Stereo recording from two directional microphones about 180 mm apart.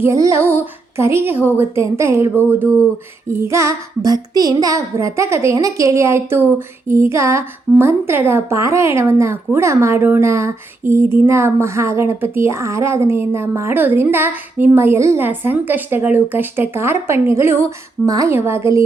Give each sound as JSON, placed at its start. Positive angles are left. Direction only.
{"t": 0.0, "sound": "a woman's voice", "side_deg": -15}